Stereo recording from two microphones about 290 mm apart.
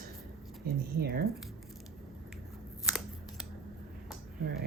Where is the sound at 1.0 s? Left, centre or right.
Right.